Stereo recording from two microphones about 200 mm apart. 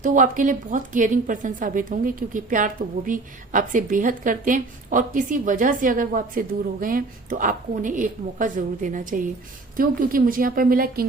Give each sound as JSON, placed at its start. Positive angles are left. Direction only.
{"t": 0.0, "sound": "a woman's voice", "side_deg": -40}